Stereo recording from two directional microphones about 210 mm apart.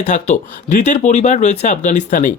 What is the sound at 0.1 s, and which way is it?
Speech, 35° left (ahead or behind).